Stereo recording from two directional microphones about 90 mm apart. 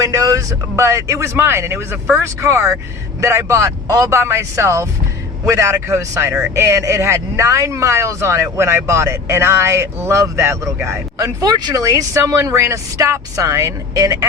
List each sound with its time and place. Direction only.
0.0 s a man's voice: 40° right (ahead or behind)